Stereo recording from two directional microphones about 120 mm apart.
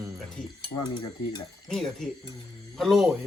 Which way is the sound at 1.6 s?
5° left (ahead or behind).